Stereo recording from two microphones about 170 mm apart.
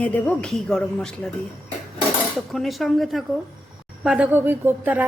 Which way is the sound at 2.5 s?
Centre (ahead or behind).